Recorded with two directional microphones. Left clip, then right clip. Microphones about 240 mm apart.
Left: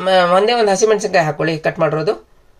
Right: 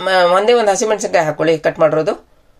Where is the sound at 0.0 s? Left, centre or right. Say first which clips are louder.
Even; right.